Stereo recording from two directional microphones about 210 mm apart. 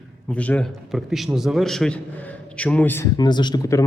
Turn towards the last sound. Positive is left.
turn(degrees=15)  # may be behind; listen again after turning